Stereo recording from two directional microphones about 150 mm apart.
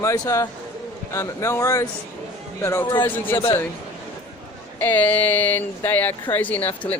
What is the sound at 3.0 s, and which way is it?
Speech, 15° left (ahead or behind).